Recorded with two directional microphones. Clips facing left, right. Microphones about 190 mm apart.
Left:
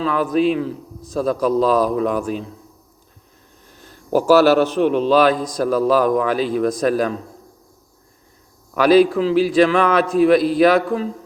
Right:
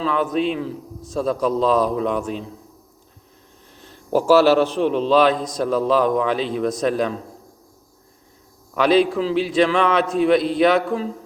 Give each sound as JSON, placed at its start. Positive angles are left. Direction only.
{"t": 0.0, "sound": "a man's voice", "side_deg": 5}
{"t": 4.3, "sound": "a man's voice", "side_deg": -30}
{"t": 4.8, "sound": "a man's voice", "side_deg": 0}
{"t": 8.7, "sound": "a man's voice", "side_deg": 5}